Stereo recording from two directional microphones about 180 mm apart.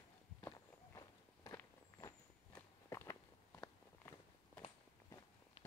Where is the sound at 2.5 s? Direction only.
15° left (ahead or behind).